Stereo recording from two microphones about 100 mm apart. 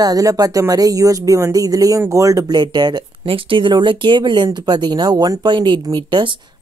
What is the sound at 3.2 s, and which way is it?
Speech, 60° right (ahead or behind).